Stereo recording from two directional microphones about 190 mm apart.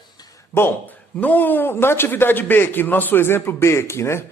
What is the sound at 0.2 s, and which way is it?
Speech, 20° left (ahead or behind).